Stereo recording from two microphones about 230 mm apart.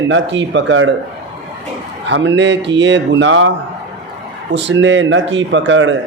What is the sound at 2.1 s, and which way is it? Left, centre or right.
A man's voice, right.